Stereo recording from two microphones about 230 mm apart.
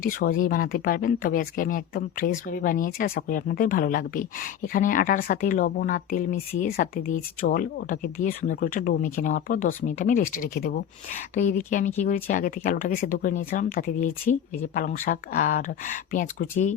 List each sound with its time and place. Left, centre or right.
0.0 s speech: left